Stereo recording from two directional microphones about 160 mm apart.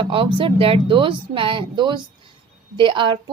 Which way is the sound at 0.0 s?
30° right (ahead or behind).